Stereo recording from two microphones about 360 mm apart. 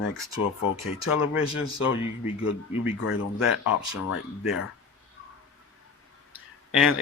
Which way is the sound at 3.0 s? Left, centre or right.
Left.